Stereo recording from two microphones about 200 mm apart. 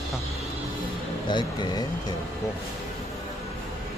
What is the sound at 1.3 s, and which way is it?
Speech, 20° left (ahead or behind).